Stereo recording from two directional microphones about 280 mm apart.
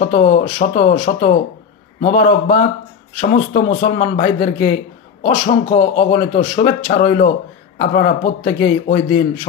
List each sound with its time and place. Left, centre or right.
0.0 s a man's voice: left